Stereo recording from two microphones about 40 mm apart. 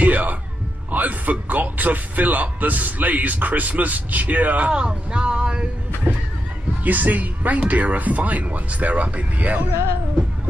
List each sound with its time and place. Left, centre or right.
0.0 s music: right
0.9 s a man's voice: right
4.6 s speech: right
6.8 s speech: right